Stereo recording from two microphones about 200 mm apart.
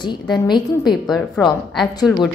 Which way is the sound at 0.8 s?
Centre (ahead or behind).